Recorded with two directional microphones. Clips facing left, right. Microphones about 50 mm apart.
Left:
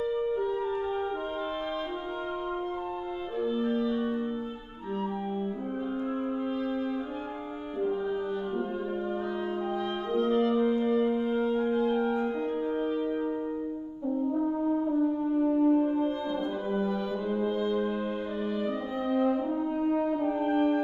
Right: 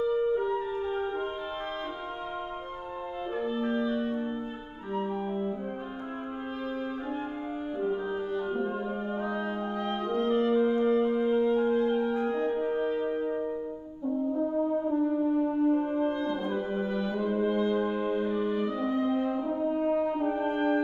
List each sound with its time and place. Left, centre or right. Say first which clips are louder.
9.2 s music: even; right
11.0 s music: right 2 dB; right
16.7 s brass instrument: left 1 dB; right
18.9 s brass instrument: right 1 dB; centre
20.3 s french horn: left 2 dB; centre